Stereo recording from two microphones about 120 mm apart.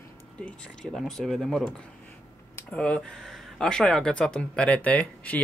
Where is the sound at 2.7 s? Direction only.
10° left (ahead or behind).